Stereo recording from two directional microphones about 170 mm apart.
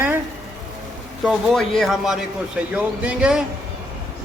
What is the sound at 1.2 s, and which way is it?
Speech, centre (ahead or behind).